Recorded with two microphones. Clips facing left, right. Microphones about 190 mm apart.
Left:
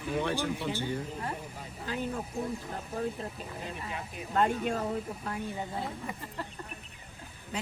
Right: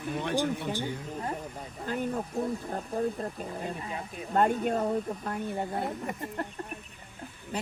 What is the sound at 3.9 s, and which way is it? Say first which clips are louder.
Speech: right 2 dB; 45° right (ahead or behind).